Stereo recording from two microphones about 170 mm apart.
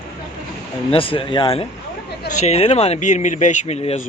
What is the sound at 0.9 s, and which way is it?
Speech, 30° left (ahead or behind).